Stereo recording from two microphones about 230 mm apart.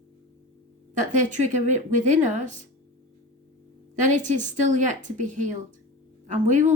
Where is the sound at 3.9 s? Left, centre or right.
Right.